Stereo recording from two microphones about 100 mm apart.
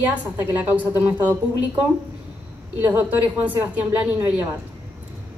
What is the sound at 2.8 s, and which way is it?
A woman's voice, 15° right (ahead or behind).